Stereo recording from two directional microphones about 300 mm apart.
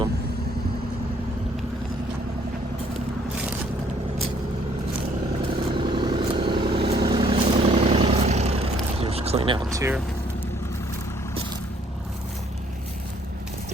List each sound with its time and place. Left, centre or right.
5.7 s vehicle: centre
9.7 s speech: centre